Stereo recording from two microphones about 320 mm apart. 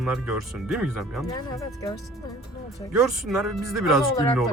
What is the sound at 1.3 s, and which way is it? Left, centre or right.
Speech, centre.